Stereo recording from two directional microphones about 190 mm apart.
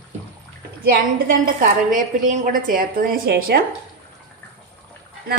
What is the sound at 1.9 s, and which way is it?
A woman's voice, 45° right (ahead or behind).